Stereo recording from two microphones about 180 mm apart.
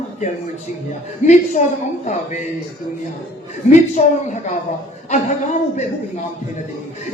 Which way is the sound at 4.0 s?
40° left (ahead or behind).